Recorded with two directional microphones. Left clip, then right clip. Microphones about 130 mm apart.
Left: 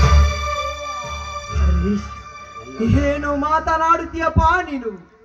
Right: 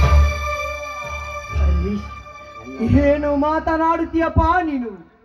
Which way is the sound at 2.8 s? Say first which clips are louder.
Right 2 dB; 25° right (ahead or behind).